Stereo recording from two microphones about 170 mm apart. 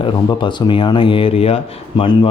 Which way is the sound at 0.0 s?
25° left (ahead or behind).